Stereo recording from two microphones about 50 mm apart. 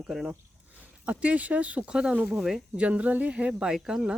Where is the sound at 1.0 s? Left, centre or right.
Right.